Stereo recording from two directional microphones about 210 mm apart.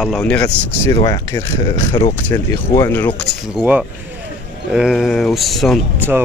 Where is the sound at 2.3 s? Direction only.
10° left (ahead or behind).